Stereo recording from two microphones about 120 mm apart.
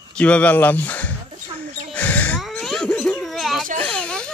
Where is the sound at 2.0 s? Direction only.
15° left (ahead or behind).